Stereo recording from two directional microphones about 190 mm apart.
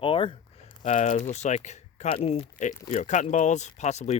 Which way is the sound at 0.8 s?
40° left (ahead or behind).